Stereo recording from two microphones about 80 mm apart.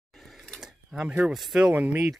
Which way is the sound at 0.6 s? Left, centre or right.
Centre.